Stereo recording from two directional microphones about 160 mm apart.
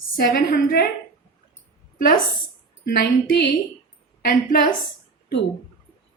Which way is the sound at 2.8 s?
90° left.